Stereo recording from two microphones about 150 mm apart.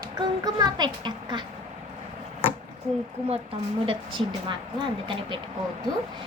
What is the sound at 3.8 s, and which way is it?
A woman's voice, 35° right (ahead or behind).